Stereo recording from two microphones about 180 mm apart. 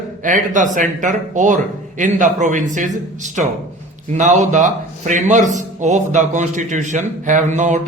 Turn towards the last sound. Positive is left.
turn(degrees=-40)  # may be behind; listen again after turning